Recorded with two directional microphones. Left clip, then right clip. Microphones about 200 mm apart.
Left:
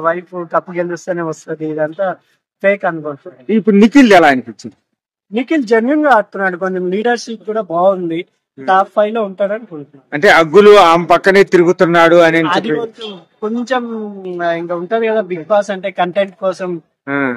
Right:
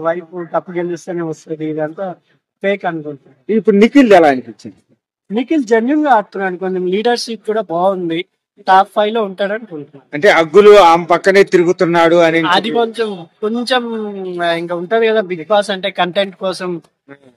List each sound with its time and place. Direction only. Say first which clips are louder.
0.0 s speech: left 2 dB; centre (ahead or behind)
3.4 s a man's voice: right 1 dB; 50° left (ahead or behind)
5.3 s speech: left 1 dB; centre (ahead or behind)
10.0 s a man's voice: left 2 dB; 50° left (ahead or behind)
12.4 s speech: right 2 dB; centre (ahead or behind)